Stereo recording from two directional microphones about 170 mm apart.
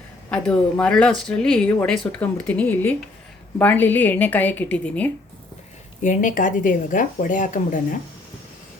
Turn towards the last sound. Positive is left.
turn(degrees=50)  # may be behind; listen again after turning